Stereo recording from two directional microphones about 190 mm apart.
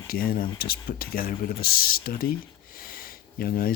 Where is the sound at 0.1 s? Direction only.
50° left (ahead or behind).